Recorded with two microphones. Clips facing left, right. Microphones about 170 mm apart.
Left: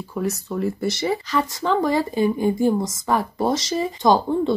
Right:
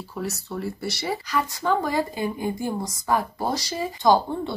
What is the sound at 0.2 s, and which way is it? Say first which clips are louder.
Speech: left 6 dB; 15° left (ahead or behind).